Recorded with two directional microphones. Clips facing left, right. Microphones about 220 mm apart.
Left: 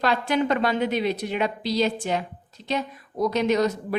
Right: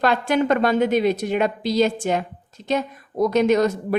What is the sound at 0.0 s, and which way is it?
A woman's voice, 50° right (ahead or behind).